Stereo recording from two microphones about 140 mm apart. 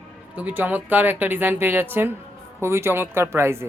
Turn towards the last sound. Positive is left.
turn(degrees=-15)  # may be behind; listen again after turning